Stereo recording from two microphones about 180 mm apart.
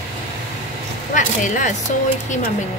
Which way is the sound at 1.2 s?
45° left (ahead or behind).